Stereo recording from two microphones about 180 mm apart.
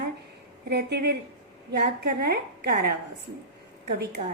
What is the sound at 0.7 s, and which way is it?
Speech, 65° right (ahead or behind).